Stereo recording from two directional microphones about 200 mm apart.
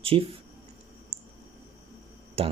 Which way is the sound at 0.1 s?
30° right (ahead or behind).